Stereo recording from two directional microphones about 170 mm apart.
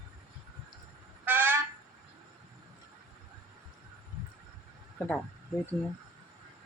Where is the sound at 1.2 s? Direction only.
10° right (ahead or behind).